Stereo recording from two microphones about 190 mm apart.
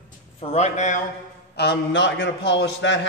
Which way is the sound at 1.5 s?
65° left (ahead or behind).